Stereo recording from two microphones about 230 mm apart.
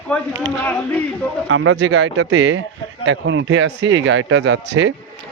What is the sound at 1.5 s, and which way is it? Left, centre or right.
Speech, right.